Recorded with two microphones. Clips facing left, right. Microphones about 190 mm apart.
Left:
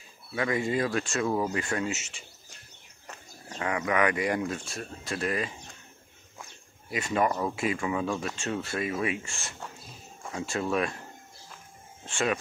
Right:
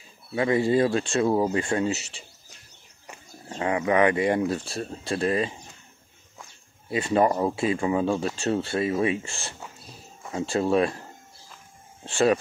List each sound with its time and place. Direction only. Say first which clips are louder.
0.3 s speech: right 6 dB; 25° right (ahead or behind)
3.4 s speech: right 5 dB; 25° right (ahead or behind)
6.9 s speech: right 5 dB; 30° right (ahead or behind)
12.0 s speech: right 8 dB; 35° right (ahead or behind)